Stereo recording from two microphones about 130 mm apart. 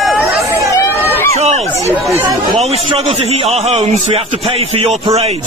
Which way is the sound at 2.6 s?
55° right (ahead or behind).